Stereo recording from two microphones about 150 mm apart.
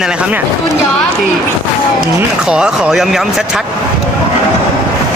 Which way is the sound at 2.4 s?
5° right (ahead or behind).